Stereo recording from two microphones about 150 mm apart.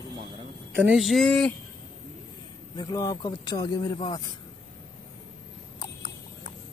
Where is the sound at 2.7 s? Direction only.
25° left (ahead or behind).